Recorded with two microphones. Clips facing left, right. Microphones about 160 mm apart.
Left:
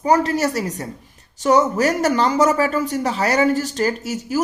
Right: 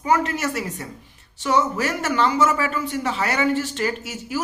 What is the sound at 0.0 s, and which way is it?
Speech, 35° left (ahead or behind).